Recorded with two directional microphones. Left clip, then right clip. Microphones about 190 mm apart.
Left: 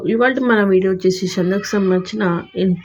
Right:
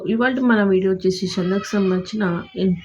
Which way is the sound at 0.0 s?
20° left (ahead or behind).